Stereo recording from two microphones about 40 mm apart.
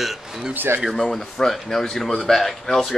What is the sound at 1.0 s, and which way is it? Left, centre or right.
Speech, centre.